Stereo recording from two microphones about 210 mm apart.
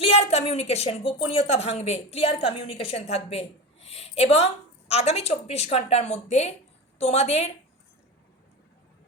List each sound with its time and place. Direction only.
0.0 s a woman's voice: 30° left (ahead or behind)